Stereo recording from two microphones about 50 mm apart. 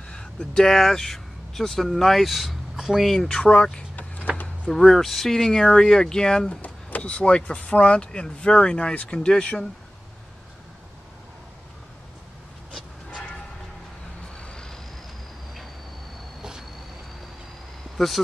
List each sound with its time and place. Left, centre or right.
0.1 s speech: centre
3.2 s speech: centre
4.7 s speech: centre
6.6 s a sound: left
7.1 s speech: centre
14.3 s vehicle: centre
17.9 s speech: centre